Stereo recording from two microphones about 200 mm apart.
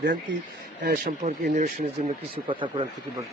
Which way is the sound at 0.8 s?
45° right (ahead or behind).